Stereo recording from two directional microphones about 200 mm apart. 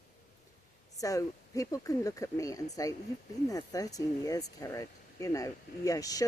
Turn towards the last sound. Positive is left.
turn(degrees=15)  # may be behind; listen again after turning